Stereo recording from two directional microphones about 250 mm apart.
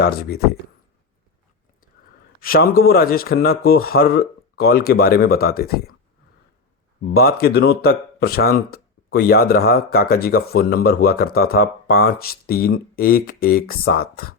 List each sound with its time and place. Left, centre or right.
0.0 s speech: left
2.4 s speech: left
7.1 s speech: left